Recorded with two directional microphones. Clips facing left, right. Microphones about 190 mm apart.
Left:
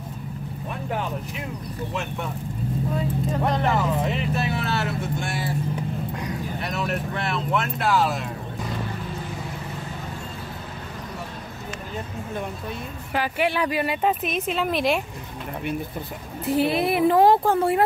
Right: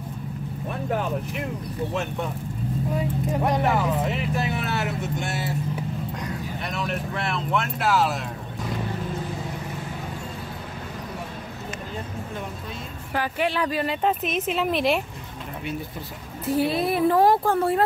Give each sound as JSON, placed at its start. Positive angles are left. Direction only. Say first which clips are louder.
{"t": 2.9, "sound": "speech", "louder": "right 1 dB", "side_deg": -15}
{"t": 4.4, "sound": "speech", "louder": "left 1 dB", "side_deg": -15}
{"t": 6.6, "sound": "speech", "louder": "left 1 dB", "side_deg": 0}
{"t": 13.1, "sound": "speech", "louder": "left 1 dB", "side_deg": 10}
{"t": 16.6, "sound": "speech", "louder": "left 2 dB", "side_deg": 15}